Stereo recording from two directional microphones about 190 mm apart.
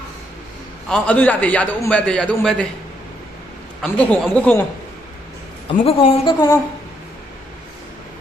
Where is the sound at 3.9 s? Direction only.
5° left (ahead or behind).